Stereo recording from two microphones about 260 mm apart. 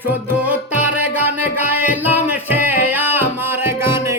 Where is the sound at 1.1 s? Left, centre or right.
Centre.